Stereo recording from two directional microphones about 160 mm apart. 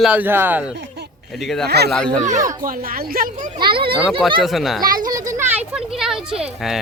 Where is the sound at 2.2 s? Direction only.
55° right (ahead or behind).